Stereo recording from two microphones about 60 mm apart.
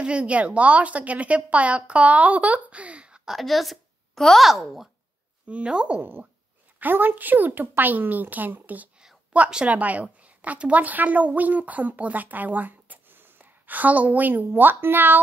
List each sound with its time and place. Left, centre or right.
0.0 s a woman's voice: centre
3.3 s a woman's voice: centre
5.5 s a woman's voice: centre
5.9 s a woman's voice: right